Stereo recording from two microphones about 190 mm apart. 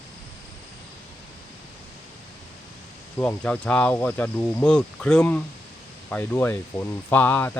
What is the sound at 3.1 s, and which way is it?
Speech, 10° left (ahead or behind).